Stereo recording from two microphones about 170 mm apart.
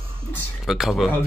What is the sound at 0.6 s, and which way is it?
Speech, centre (ahead or behind).